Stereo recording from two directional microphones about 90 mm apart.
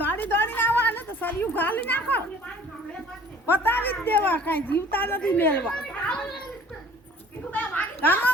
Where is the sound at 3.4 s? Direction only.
25° left (ahead or behind).